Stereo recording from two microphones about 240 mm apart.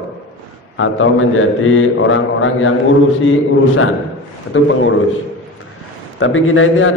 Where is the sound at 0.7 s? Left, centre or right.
Left.